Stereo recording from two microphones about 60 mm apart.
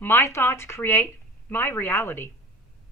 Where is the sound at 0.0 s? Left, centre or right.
Left.